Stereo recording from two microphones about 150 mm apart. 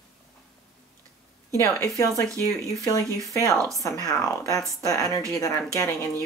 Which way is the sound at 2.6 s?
20° left (ahead or behind).